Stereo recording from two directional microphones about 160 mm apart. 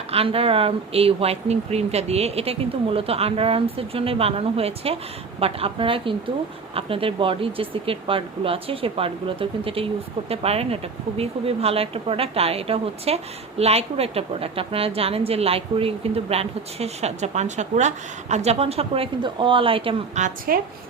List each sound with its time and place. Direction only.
0.1 s a woman's voice: 35° right (ahead or behind)
20.5 s a woman's voice: 65° right (ahead or behind)